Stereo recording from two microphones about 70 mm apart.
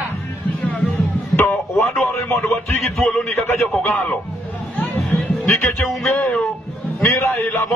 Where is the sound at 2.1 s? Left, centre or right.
Left.